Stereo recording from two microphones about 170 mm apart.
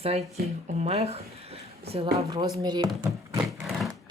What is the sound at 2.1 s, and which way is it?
Speech, 25° right (ahead or behind).